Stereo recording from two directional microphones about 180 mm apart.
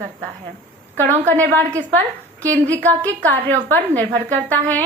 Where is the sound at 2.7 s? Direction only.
10° left (ahead or behind).